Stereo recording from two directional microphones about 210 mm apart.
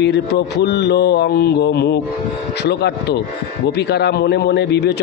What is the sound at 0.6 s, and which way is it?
A man's voice, 55° left (ahead or behind).